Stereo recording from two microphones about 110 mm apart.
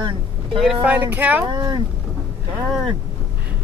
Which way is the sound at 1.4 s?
40° right (ahead or behind).